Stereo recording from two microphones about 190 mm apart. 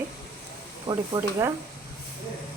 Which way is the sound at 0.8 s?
20° right (ahead or behind).